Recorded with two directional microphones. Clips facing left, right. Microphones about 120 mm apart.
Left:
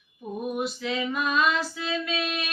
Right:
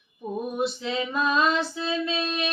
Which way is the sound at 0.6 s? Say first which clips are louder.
Right 4 dB; 30° right (ahead or behind).